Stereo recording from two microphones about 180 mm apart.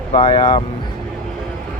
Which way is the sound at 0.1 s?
25° left (ahead or behind).